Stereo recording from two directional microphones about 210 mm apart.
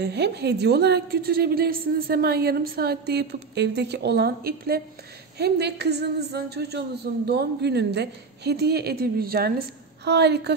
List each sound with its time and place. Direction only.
0.0 s a woman's voice: 50° right (ahead or behind)